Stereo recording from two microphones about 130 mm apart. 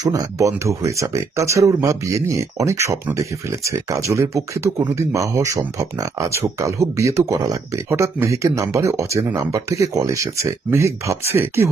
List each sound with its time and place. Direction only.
0.0 s speech: 25° right (ahead or behind)